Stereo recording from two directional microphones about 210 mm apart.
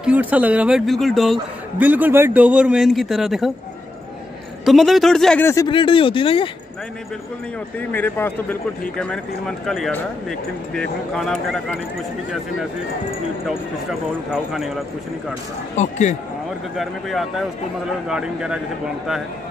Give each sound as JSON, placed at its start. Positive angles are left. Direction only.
{"t": 0.0, "sound": "speech", "side_deg": -5}
{"t": 4.6, "sound": "speech", "side_deg": 0}
{"t": 5.7, "sound": "speech", "side_deg": 25}
{"t": 7.9, "sound": "speech", "side_deg": 10}
{"t": 13.5, "sound": "speech", "side_deg": 0}
{"t": 15.7, "sound": "speech", "side_deg": 35}
{"t": 16.7, "sound": "speech", "side_deg": 0}